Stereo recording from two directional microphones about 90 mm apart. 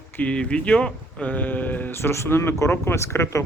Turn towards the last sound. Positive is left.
turn(degrees=30)  # may be behind; listen again after turning